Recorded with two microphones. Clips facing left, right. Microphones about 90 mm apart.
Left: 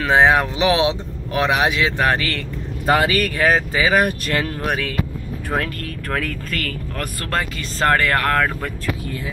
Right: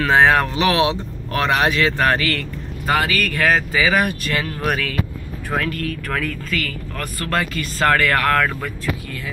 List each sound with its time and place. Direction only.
0.0 s speech: 15° left (ahead or behind)
2.1 s speech: 25° left (ahead or behind)
4.6 s speech: 25° left (ahead or behind)
6.5 s speech: 50° left (ahead or behind)
7.3 s speech: 25° left (ahead or behind)